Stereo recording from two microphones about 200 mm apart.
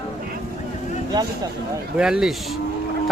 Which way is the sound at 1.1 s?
20° right (ahead or behind).